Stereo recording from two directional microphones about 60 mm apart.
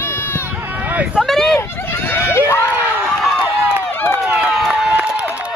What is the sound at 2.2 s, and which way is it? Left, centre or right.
Run, left.